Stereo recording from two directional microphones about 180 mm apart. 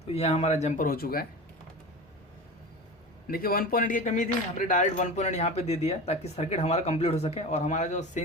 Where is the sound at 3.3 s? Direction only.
55° left (ahead or behind).